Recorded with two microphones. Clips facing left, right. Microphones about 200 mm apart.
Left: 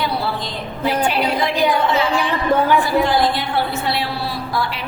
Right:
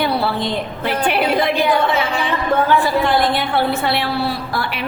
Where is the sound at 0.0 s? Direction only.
60° right (ahead or behind).